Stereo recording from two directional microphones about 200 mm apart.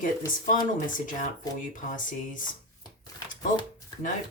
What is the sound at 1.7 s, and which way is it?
Speech, 40° left (ahead or behind).